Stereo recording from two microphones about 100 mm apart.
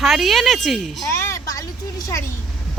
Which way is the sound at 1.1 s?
30° left (ahead or behind).